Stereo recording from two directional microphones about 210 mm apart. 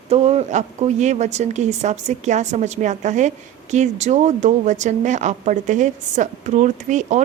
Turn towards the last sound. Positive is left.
turn(degrees=-35)  # may be behind; listen again after turning